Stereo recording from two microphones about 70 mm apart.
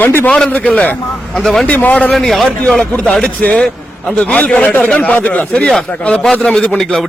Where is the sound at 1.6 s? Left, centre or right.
Left.